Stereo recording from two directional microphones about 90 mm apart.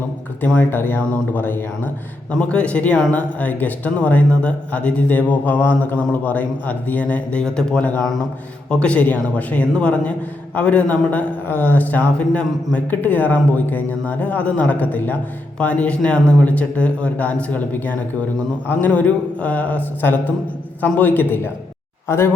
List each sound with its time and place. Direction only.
0.4 s a man's voice: 20° left (ahead or behind)